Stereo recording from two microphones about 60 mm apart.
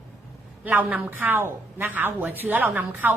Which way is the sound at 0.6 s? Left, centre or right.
Right.